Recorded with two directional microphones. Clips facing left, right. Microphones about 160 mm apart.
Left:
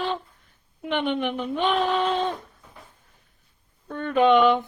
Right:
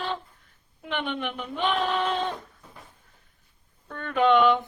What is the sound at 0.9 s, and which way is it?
Speech, 20° left (ahead or behind).